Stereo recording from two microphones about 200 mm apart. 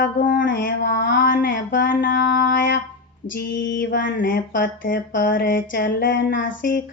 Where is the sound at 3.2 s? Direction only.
40° left (ahead or behind).